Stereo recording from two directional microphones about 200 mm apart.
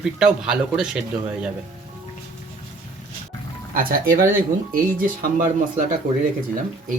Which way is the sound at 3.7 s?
45° right (ahead or behind).